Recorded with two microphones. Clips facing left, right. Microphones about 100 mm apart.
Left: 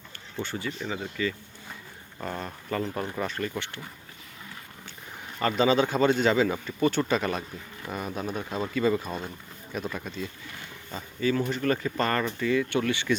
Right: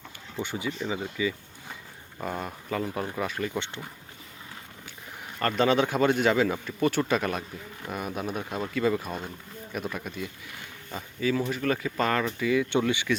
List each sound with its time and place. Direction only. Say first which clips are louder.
0.3 s speech: right 1 dB; 15° right (ahead or behind)
3.6 s speech: right 2 dB; 20° right (ahead or behind)
5.4 s speech: left 1 dB; centre (ahead or behind); by 13.1 s 15° right (ahead or behind)